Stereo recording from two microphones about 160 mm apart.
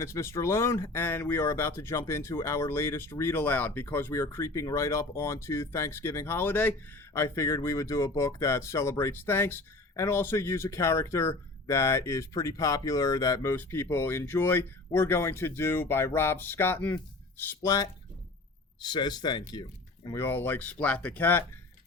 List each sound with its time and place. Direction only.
0.0 s speech: 20° left (ahead or behind)
20.1 s speech: 15° left (ahead or behind)